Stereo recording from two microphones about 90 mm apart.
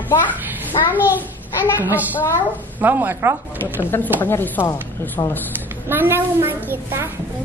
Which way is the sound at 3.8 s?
25° left (ahead or behind).